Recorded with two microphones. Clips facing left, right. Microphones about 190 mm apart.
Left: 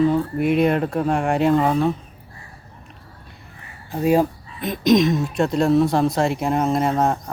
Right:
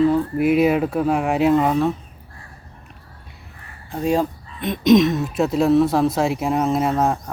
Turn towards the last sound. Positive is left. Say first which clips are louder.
# even
turn(degrees=0)  # may be behind; listen again after turning